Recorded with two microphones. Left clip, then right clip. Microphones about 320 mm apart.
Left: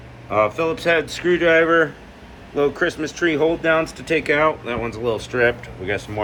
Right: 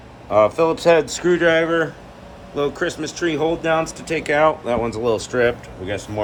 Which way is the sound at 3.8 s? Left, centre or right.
Right.